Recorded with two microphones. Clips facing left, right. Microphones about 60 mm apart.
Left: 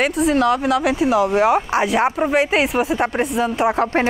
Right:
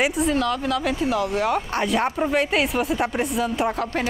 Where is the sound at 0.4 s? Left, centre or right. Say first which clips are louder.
Left 7 dB; left.